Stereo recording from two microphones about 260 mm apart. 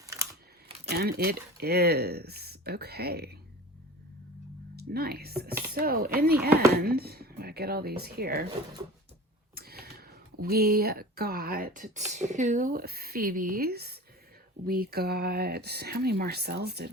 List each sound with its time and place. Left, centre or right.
0.0 s crumpling: centre
0.9 s speech: right
4.8 s speech: right
9.6 s a sound: right
10.4 s speech: right